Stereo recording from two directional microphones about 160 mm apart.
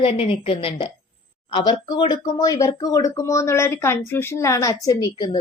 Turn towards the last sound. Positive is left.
turn(degrees=25)  # may be behind; listen again after turning